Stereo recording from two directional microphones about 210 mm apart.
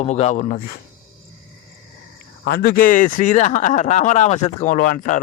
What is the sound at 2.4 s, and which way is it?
Speech, 45° left (ahead or behind).